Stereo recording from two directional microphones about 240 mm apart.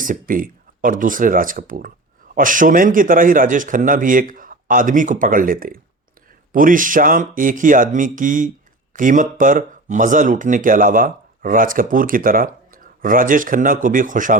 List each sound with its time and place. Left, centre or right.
0.0 s speech: right